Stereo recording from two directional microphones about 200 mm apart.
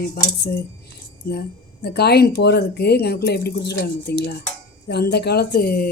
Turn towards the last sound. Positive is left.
turn(degrees=50)  # may be behind; listen again after turning